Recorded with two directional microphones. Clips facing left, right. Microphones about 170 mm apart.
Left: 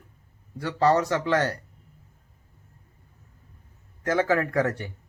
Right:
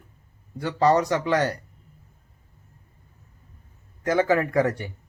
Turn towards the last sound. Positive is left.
turn(degrees=-15)  # may be behind; listen again after turning